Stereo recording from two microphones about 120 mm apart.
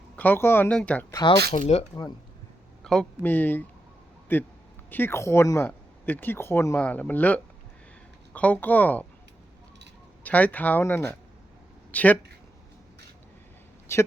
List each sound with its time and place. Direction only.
0.2 s speech: 15° left (ahead or behind)
1.5 s speech: 65° left (ahead or behind)
2.8 s a man's voice: 5° left (ahead or behind)
3.2 s speech: 15° left (ahead or behind)
10.2 s speech: 10° left (ahead or behind)
13.9 s speech: 20° left (ahead or behind)